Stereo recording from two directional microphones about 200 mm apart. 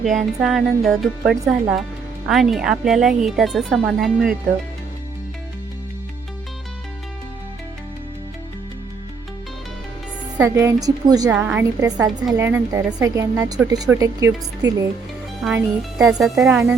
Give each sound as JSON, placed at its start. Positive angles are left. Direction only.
{"t": 0.2, "sound": "speech", "side_deg": 0}
{"t": 10.3, "sound": "speech", "side_deg": -15}
{"t": 11.3, "sound": "speech", "side_deg": -5}
{"t": 15.4, "sound": "speech", "side_deg": 0}